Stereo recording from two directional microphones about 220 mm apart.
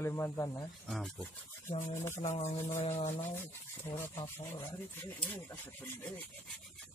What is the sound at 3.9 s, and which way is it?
Speech, 15° left (ahead or behind).